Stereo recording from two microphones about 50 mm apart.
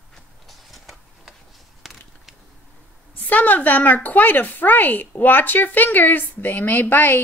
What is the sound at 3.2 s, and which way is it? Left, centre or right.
Speech, left.